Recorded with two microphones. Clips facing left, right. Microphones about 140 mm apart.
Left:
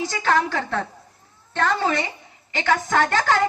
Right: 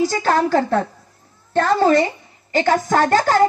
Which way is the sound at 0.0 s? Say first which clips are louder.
Right 4 dB; 40° right (ahead or behind).